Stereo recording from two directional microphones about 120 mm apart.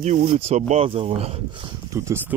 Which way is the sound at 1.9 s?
25° right (ahead or behind).